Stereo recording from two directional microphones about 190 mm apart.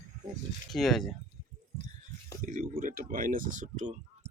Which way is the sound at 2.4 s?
45° right (ahead or behind).